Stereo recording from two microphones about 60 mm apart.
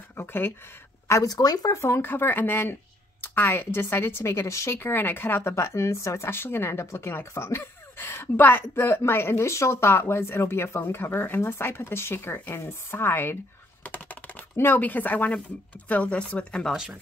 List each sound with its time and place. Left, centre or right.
0.1 s speech: left
1.2 s speech: left
1.8 s speech: left
4.7 s speech: left
5.5 s speech: left
13.8 s typing: left
15.9 s speech: left